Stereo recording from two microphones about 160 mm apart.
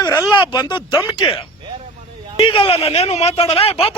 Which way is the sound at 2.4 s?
35° left (ahead or behind).